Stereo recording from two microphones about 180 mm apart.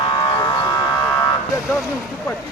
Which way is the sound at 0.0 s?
25° left (ahead or behind).